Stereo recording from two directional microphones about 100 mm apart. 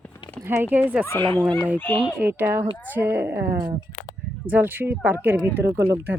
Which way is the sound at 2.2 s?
20° right (ahead or behind).